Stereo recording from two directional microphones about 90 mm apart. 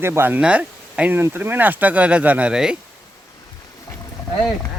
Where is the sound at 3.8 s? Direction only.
35° left (ahead or behind).